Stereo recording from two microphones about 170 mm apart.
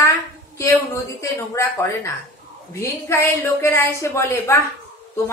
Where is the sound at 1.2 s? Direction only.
15° left (ahead or behind).